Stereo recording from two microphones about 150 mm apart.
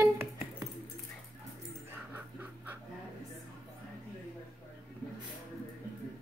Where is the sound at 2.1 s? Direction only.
10° right (ahead or behind).